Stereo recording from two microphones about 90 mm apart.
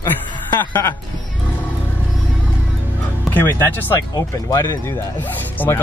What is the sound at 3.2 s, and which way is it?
Speech, 20° left (ahead or behind).